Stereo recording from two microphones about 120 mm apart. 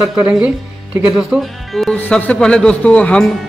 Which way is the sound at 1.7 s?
5° left (ahead or behind).